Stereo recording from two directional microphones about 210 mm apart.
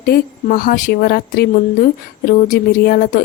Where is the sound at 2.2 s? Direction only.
40° left (ahead or behind).